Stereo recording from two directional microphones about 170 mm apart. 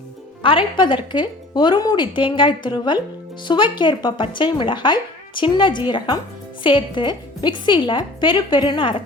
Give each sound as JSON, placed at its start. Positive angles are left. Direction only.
{"t": 0.4, "sound": "a woman's voice", "side_deg": 30}